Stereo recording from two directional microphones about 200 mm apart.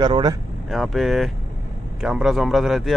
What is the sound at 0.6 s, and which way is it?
Speech, centre (ahead or behind).